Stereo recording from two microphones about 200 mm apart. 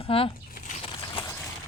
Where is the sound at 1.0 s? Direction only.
20° left (ahead or behind).